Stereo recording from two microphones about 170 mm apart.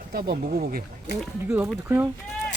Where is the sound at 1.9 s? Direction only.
10° right (ahead or behind).